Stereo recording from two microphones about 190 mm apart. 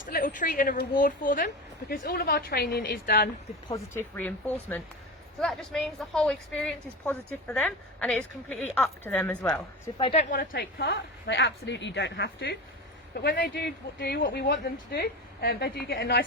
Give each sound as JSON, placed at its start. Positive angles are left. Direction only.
{"t": 0.0, "sound": "a woman's voice", "side_deg": 45}
{"t": 3.7, "sound": "a woman's voice", "side_deg": 10}
{"t": 10.0, "sound": "a woman's voice", "side_deg": 30}
{"t": 10.3, "sound": "speech", "side_deg": 55}